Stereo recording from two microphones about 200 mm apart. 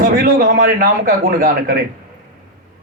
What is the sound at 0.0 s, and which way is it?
A man's voice, 50° right (ahead or behind).